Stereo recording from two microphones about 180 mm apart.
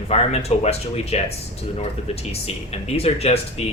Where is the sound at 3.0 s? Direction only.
35° left (ahead or behind).